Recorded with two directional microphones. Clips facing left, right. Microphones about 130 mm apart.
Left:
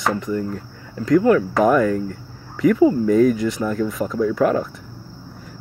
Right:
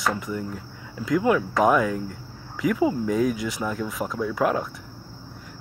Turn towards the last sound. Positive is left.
turn(degrees=-5)  # may be behind; listen again after turning